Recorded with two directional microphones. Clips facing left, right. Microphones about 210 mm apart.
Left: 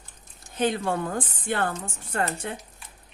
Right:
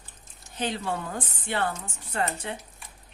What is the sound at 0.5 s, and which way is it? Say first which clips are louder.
Speech: left 5 dB; 50° left (ahead or behind).